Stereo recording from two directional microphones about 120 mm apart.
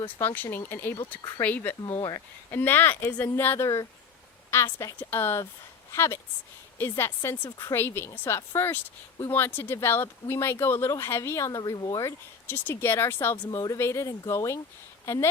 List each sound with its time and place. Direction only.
0.0 s speech: 15° left (ahead or behind)
2.0 s speech: 35° left (ahead or behind)
2.5 s speech: 15° left (ahead or behind)